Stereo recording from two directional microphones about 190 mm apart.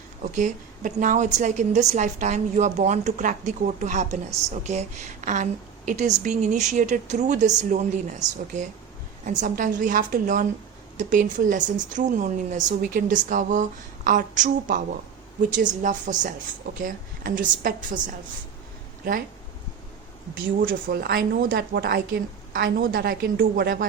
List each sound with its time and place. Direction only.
0.2 s a woman's voice: 40° right (ahead or behind)
20.3 s speech: 50° right (ahead or behind)